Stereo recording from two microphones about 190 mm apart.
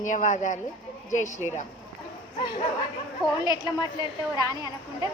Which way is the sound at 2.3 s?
25° left (ahead or behind).